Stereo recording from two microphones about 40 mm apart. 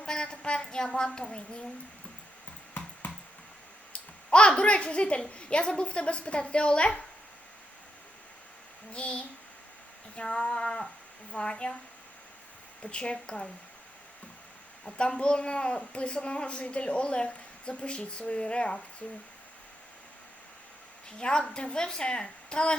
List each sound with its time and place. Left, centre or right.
0.0 s a sound: centre
0.6 s a woman's voice: centre
3.9 s a sound: left
5.4 s a woman's voice: left
8.9 s a woman's voice: left
12.8 s a woman's voice: left
14.9 s a woman's voice: left
19.0 s speech: left
21.2 s a woman's voice: left